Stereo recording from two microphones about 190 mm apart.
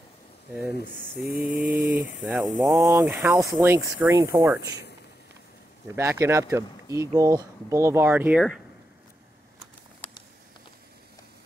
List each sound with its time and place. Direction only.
1.2 s a sound: 50° right (ahead or behind)
1.7 s speech: 10° right (ahead or behind)
2.8 s speech: 15° right (ahead or behind)
5.9 s speech: 15° right (ahead or behind)